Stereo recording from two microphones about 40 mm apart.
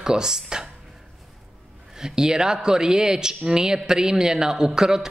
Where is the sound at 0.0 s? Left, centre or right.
Centre.